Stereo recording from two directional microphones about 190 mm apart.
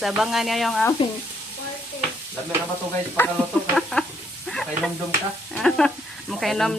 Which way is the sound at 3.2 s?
10° left (ahead or behind).